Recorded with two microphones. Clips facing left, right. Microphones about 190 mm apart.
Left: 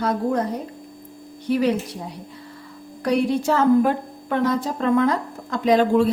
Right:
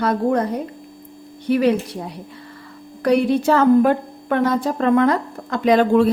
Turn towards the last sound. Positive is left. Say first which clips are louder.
# right 2 dB
turn(degrees=-65)  # may be behind; listen again after turning